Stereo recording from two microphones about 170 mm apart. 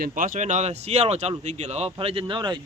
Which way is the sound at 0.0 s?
55° right (ahead or behind).